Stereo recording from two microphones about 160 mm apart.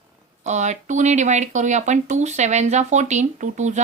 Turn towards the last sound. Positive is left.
turn(degrees=-45)  # may be behind; listen again after turning